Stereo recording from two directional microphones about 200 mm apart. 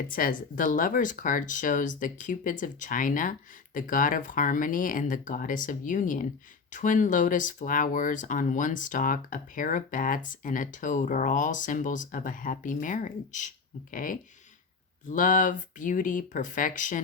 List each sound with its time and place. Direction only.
0.1 s speech: 45° left (ahead or behind)